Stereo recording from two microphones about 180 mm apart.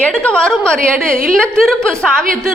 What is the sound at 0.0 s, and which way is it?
A woman's voice, 5° left (ahead or behind).